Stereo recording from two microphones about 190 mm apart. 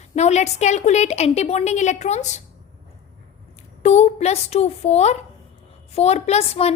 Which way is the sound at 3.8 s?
35° left (ahead or behind).